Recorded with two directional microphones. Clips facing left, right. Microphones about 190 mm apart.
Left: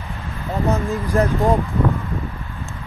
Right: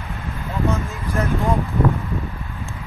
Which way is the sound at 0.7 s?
30° left (ahead or behind).